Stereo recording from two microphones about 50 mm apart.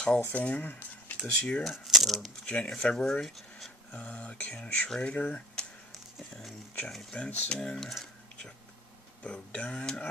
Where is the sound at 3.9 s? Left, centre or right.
Left.